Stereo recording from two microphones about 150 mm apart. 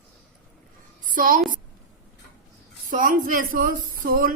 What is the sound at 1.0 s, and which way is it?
Speech, 65° right (ahead or behind).